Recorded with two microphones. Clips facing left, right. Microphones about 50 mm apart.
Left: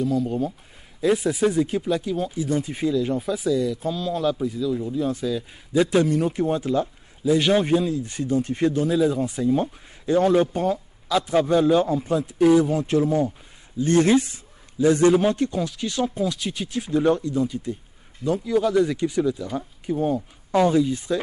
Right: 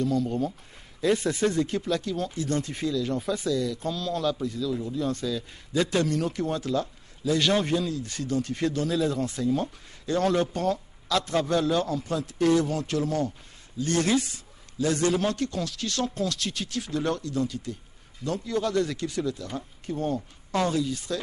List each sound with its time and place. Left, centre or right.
0.0 s a man's voice: centre
3.2 s a man's voice: centre; by 21.2 s left